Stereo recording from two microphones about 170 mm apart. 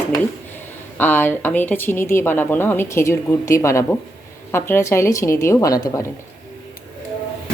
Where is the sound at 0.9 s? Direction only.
10° left (ahead or behind).